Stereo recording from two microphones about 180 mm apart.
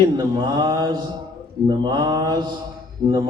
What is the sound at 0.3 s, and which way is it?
A man's voice, 20° right (ahead or behind).